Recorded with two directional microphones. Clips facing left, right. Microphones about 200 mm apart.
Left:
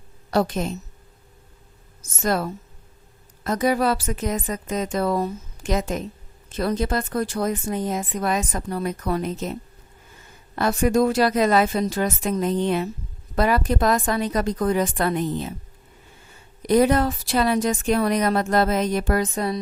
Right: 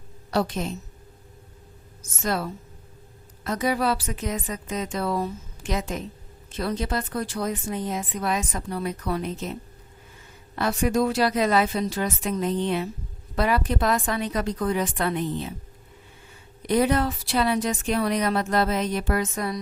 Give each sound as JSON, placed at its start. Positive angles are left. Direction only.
{"t": 0.3, "sound": "speech", "side_deg": 50}
{"t": 2.0, "sound": "speech", "side_deg": 45}
{"t": 16.6, "sound": "speech", "side_deg": 45}